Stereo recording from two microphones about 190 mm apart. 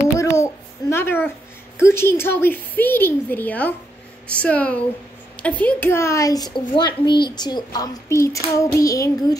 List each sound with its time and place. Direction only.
0.2 s babbling: 15° left (ahead or behind)
1.8 s a woman's voice: 15° left (ahead or behind)